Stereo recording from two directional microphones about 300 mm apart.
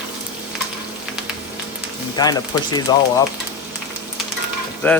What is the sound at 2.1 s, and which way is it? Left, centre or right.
Speech, centre.